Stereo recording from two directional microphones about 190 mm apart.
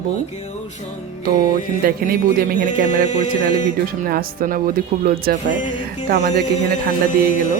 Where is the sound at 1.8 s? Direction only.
50° right (ahead or behind).